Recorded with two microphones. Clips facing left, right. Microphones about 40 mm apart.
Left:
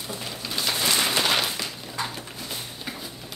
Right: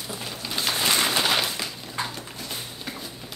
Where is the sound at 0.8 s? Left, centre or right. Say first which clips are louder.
Right 1 dB; right.